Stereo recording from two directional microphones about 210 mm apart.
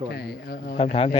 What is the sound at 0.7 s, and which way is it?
Speech, 25° left (ahead or behind).